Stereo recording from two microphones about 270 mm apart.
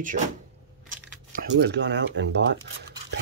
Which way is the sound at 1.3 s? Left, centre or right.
Right.